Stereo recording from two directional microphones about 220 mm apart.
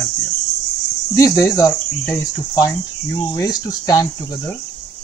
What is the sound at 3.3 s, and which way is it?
Speech, 15° left (ahead or behind).